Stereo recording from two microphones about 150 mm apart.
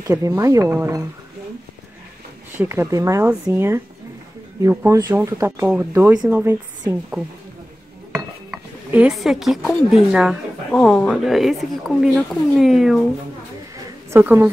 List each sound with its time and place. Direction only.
0.0 s speech: 20° right (ahead or behind)
2.5 s speech: 15° right (ahead or behind)
14.1 s speech: 10° right (ahead or behind)